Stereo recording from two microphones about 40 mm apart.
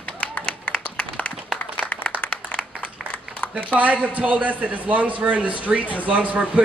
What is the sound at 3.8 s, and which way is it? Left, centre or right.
A man's voice, right.